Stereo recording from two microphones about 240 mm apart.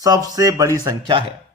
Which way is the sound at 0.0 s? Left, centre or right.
Centre.